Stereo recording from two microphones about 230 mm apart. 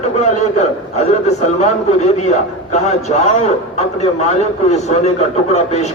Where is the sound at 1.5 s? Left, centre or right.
Left.